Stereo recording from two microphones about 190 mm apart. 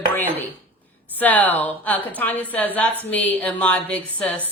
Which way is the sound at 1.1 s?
10° left (ahead or behind).